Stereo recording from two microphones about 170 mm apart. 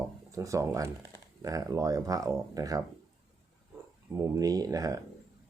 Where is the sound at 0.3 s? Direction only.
20° right (ahead or behind).